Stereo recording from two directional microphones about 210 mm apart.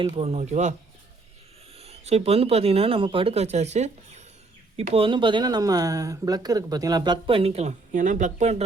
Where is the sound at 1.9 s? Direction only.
30° right (ahead or behind).